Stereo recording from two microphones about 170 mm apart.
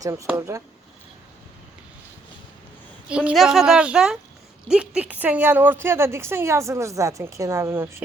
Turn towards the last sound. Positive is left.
turn(degrees=-15)  # may be behind; listen again after turning